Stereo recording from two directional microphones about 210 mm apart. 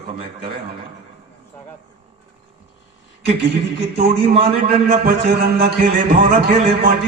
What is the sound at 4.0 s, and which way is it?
A man's voice, 50° right (ahead or behind).